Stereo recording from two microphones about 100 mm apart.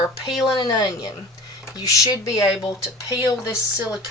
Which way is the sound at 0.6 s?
45° left (ahead or behind).